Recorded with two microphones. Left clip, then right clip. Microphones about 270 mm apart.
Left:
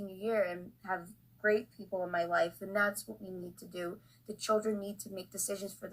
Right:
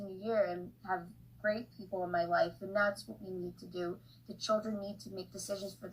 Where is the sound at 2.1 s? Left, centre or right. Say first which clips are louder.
Even; left.